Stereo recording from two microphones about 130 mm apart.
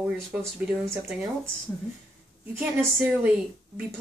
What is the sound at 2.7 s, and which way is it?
Speech, 10° right (ahead or behind).